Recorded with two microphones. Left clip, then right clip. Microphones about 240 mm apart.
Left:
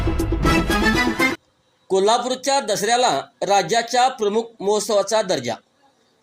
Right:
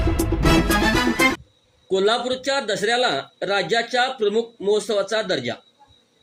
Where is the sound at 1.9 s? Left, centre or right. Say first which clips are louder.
Left 2 dB; left.